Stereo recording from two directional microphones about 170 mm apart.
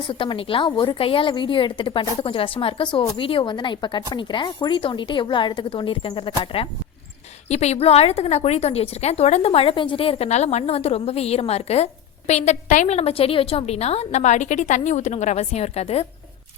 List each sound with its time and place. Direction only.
0.1 s a woman's voice: 30° left (ahead or behind)